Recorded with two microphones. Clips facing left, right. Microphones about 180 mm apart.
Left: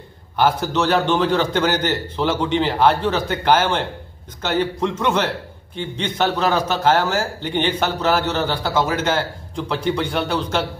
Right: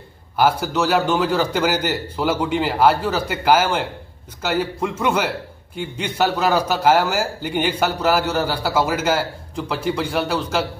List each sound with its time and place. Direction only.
0.4 s a man's voice: 10° right (ahead or behind)